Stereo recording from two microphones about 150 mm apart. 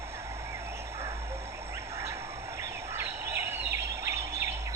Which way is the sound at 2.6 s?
20° right (ahead or behind).